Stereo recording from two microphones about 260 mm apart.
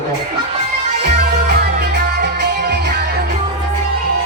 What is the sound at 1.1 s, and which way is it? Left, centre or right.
Music, right.